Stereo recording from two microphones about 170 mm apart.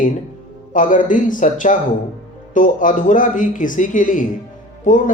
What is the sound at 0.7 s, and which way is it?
A man's voice, 50° left (ahead or behind).